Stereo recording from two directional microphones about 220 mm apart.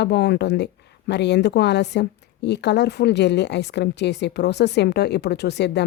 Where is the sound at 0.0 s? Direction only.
50° left (ahead or behind).